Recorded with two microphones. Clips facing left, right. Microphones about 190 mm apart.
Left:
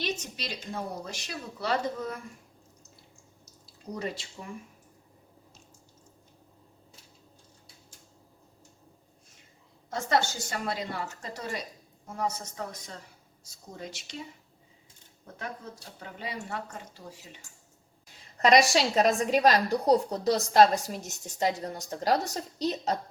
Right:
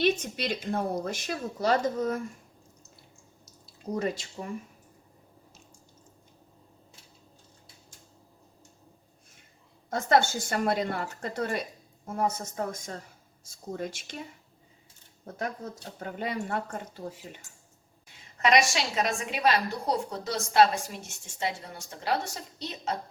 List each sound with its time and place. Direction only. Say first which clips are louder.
0.0 s a woman's voice: right 8 dB; 55° right (ahead or behind)
3.9 s a woman's voice: right 5 dB; 45° right (ahead or behind)
9.9 s a woman's voice: right 4 dB; 55° right (ahead or behind)
15.4 s a woman's voice: right 5 dB; 45° right (ahead or behind)
18.3 s a woman's voice: left 3 dB; 35° left (ahead or behind)